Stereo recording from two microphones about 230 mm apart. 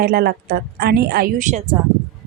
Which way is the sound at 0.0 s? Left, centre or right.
Right.